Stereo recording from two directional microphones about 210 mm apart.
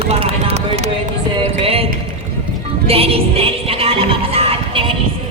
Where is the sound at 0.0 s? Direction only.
30° right (ahead or behind).